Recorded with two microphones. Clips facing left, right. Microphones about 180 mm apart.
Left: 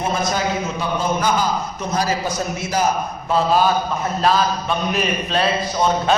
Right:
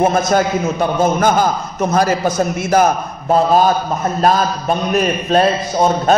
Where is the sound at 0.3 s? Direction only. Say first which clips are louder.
Right 7 dB; 50° right (ahead or behind).